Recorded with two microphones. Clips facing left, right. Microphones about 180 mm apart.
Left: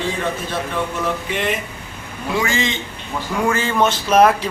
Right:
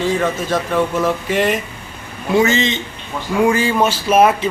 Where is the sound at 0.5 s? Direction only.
45° right (ahead or behind).